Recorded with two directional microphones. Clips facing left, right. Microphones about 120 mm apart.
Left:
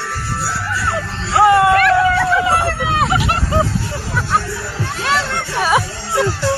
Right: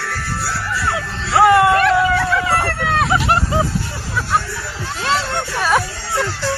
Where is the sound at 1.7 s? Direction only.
25° right (ahead or behind).